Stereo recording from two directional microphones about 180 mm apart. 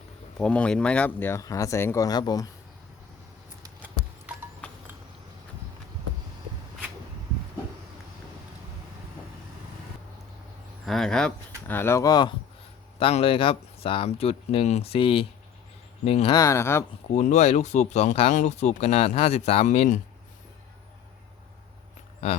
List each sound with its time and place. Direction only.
0.3 s speech: 5° left (ahead or behind)
3.6 s mouse: 10° right (ahead or behind)
10.8 s speech: centre (ahead or behind); by 12.3 s 20° left (ahead or behind)
13.0 s speech: 30° left (ahead or behind)
16.3 s speech: 15° left (ahead or behind)
17.2 s speech: 40° left (ahead or behind)